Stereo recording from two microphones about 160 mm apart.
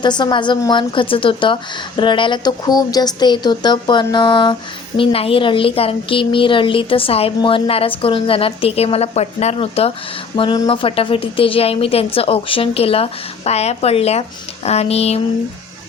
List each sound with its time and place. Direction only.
0.0 s a woman's voice: 30° left (ahead or behind)